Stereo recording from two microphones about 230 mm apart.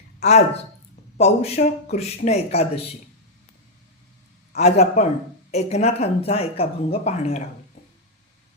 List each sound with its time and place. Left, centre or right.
0.2 s speech: left
4.5 s speech: left